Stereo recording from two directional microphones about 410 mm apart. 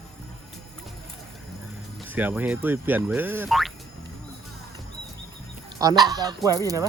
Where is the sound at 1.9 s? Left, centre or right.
Centre.